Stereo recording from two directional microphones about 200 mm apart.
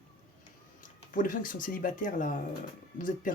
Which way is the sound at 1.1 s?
40° left (ahead or behind).